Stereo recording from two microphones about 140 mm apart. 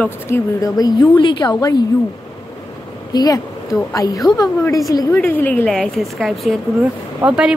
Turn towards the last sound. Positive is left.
turn(degrees=-5)  # may be behind; listen again after turning